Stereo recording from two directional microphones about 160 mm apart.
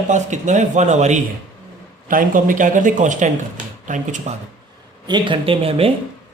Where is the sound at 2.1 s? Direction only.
60° right (ahead or behind).